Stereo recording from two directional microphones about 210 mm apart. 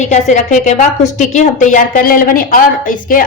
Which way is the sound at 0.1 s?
35° left (ahead or behind).